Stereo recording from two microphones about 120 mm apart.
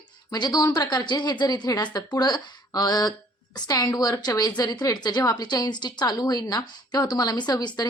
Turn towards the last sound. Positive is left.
turn(degrees=35)  # may be behind; listen again after turning